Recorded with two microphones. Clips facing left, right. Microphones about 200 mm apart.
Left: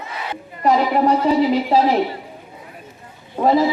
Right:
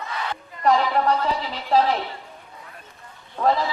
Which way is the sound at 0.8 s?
20° left (ahead or behind).